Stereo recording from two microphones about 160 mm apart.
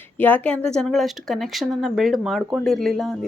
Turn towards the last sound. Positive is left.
turn(degrees=0)  # may be behind; listen again after turning